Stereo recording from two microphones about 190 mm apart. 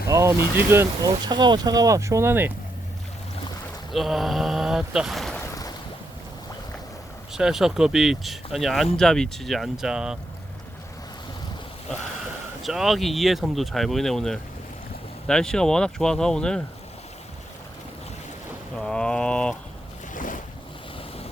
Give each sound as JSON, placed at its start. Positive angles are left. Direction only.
{"t": 0.1, "sound": "vehicle", "side_deg": -15}
{"t": 0.7, "sound": "speech", "side_deg": -15}
{"t": 3.9, "sound": "speech", "side_deg": 0}
{"t": 5.4, "sound": "a sound", "side_deg": 20}
{"t": 7.3, "sound": "speech", "side_deg": -5}
{"t": 12.6, "sound": "speech", "side_deg": 0}
{"t": 18.8, "sound": "a sound", "side_deg": 5}
{"t": 20.1, "sound": "boat", "side_deg": 45}